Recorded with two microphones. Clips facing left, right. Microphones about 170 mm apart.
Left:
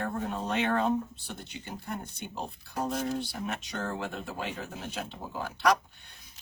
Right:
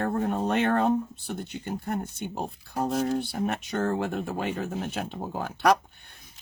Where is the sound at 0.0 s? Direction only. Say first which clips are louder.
Right 6 dB; 55° right (ahead or behind).